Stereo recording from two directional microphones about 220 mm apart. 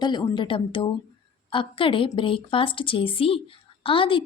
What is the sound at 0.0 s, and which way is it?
A woman's voice, 20° left (ahead or behind).